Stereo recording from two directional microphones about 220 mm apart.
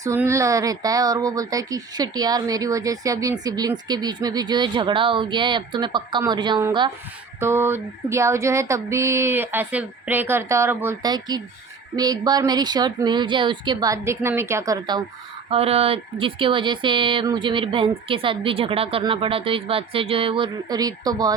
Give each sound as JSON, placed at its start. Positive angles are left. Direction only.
{"t": 0.0, "sound": "speech", "side_deg": -10}